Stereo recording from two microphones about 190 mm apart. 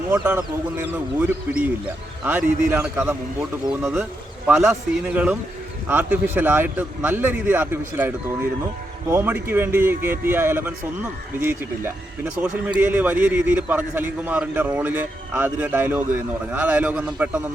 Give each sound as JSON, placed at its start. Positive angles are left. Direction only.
{"t": 0.1, "sound": "speech", "side_deg": -10}
{"t": 2.2, "sound": "speech", "side_deg": -10}